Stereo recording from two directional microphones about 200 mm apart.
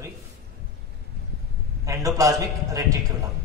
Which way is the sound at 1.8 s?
15° right (ahead or behind).